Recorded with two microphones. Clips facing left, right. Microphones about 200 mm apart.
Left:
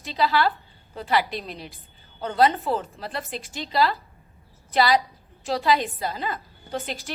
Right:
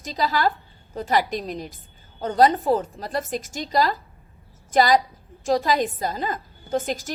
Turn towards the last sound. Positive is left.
turn(degrees=-45)  # may be behind; listen again after turning